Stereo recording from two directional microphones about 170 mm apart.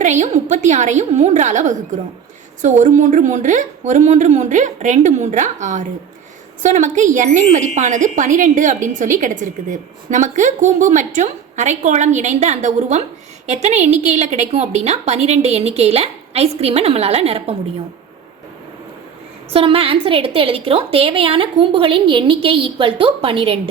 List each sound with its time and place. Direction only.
0.0 s a woman's voice: 45° right (ahead or behind)
19.5 s a woman's voice: 35° right (ahead or behind)